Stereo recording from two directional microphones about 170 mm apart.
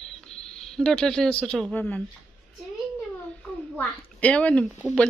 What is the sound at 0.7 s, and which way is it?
A woman's voice, 5° left (ahead or behind).